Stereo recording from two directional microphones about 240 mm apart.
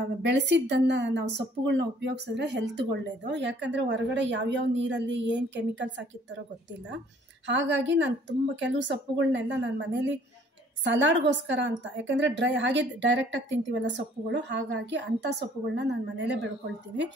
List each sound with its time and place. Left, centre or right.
0.2 s speech: right
7.4 s speech: right